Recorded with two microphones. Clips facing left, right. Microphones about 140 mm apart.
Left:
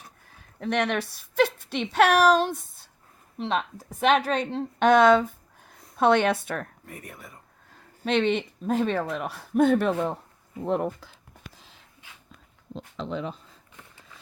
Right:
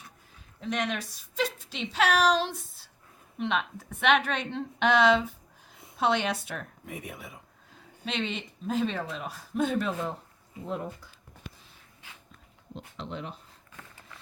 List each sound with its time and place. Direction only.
0.6 s a woman's voice: 65° left (ahead or behind)
3.3 s a woman's voice: 35° left (ahead or behind); by 6.7 s 55° left (ahead or behind)
6.8 s speech: centre (ahead or behind)
8.0 s speech: 55° left (ahead or behind)